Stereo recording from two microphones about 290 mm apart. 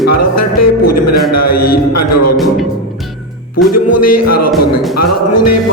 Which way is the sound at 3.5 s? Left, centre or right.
Left.